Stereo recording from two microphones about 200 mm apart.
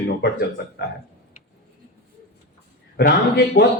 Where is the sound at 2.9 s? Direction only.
50° left (ahead or behind).